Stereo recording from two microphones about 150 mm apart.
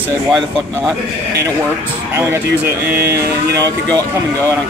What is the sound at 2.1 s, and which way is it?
Speech, 15° right (ahead or behind).